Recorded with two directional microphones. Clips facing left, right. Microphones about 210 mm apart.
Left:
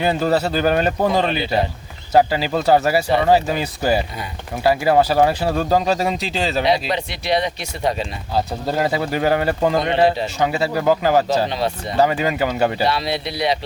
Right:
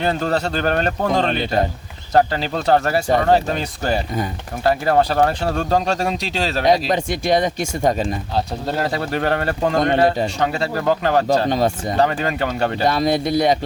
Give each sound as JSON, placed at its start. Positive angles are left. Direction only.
{"t": 0.0, "sound": "speech", "side_deg": 5}
{"t": 6.9, "sound": "speech", "side_deg": -45}
{"t": 8.4, "sound": "speech", "side_deg": 5}
{"t": 11.4, "sound": "speech", "side_deg": -45}
{"t": 11.9, "sound": "speech", "side_deg": 5}
{"t": 12.8, "sound": "speech", "side_deg": -45}